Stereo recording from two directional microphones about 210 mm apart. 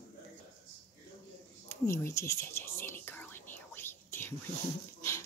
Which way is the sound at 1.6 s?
10° left (ahead or behind).